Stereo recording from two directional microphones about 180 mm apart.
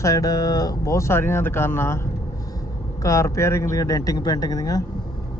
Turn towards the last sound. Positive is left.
turn(degrees=20)  # may be behind; listen again after turning